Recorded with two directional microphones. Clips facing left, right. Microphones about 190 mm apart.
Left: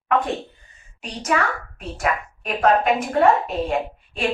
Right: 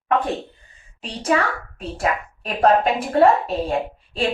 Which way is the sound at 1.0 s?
30° right (ahead or behind).